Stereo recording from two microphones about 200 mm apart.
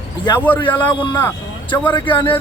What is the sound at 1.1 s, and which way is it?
Speech, 20° left (ahead or behind).